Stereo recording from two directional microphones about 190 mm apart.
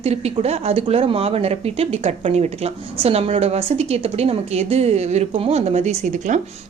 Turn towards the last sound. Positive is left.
turn(degrees=-40)  # may be behind; listen again after turning